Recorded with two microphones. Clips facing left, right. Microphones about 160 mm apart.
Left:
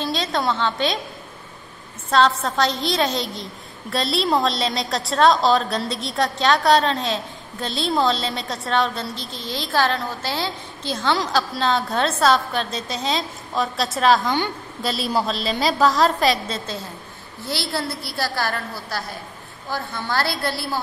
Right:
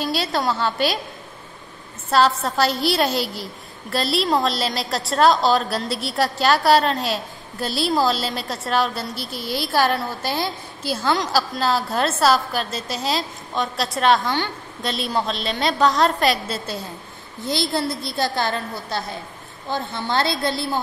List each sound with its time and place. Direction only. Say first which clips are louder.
0.0 s a woman's voice: even; 10° right (ahead or behind)
2.0 s a woman's voice: even; 5° right (ahead or behind)